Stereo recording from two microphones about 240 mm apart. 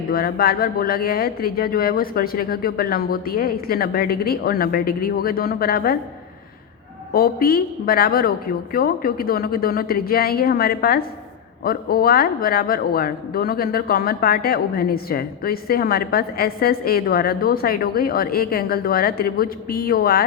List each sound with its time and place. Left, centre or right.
0.1 s speech: left
7.1 s speech: left